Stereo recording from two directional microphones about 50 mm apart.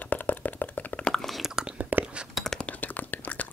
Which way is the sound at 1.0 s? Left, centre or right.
Centre.